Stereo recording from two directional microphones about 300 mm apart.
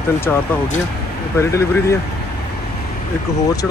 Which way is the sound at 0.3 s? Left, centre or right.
Centre.